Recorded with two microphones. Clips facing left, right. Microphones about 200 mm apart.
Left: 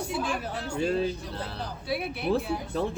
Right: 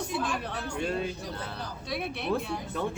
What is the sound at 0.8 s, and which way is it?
Speech, 35° left (ahead or behind).